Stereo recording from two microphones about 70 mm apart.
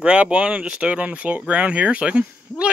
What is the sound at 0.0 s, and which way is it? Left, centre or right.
Speech, centre.